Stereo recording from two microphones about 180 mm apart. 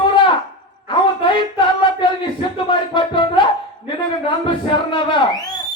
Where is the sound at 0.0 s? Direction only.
25° left (ahead or behind).